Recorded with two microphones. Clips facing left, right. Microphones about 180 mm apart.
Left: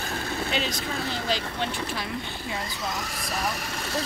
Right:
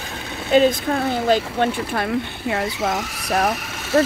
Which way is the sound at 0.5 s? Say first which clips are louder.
Right 13 dB; 55° right (ahead or behind).